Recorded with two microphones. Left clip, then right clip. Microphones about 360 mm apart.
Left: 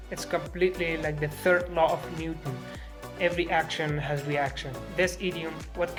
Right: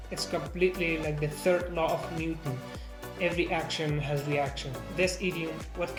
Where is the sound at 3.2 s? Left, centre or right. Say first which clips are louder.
Left 3 dB; left.